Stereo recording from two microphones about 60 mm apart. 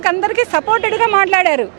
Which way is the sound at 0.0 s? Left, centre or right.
Right.